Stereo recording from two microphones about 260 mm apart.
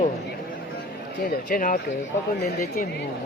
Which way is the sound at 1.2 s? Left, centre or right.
Left.